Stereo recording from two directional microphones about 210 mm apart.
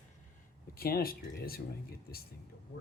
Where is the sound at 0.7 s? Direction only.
45° left (ahead or behind).